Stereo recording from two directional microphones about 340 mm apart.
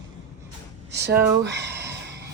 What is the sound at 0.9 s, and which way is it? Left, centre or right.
Speech, right.